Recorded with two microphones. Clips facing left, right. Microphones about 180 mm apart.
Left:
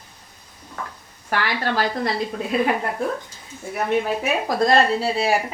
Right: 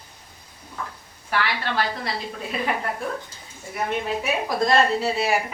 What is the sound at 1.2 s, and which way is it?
Speech, 45° left (ahead or behind).